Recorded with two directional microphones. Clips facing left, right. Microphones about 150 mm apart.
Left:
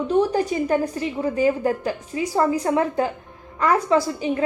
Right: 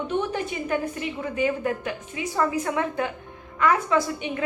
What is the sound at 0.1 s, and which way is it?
A woman's voice, 35° left (ahead or behind).